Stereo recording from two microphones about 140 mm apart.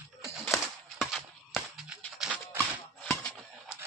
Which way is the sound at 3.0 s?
10° left (ahead or behind).